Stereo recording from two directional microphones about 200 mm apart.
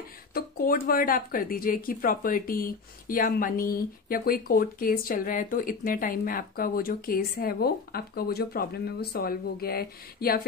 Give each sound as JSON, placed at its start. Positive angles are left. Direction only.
{"t": 0.3, "sound": "speech", "side_deg": 50}